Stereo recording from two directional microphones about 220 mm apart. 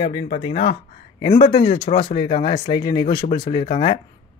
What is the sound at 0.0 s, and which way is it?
Speech, 25° left (ahead or behind).